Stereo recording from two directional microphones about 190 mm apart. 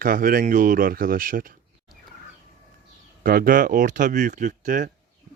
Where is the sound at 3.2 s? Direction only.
50° right (ahead or behind).